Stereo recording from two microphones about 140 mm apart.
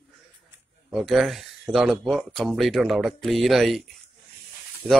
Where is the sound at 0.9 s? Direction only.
Centre (ahead or behind).